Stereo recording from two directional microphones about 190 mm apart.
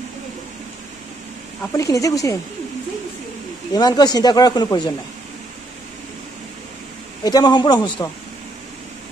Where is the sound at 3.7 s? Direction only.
20° left (ahead or behind).